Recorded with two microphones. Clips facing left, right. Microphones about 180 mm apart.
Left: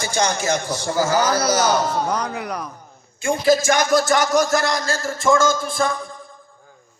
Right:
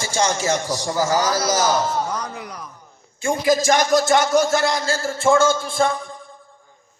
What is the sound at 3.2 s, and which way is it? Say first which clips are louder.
A man's voice: left 1 dB; 20° right (ahead or behind).